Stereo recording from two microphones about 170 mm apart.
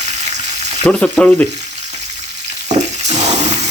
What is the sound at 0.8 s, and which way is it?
Frying, 5° left (ahead or behind).